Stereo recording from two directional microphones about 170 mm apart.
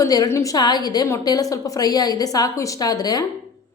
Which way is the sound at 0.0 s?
20° left (ahead or behind).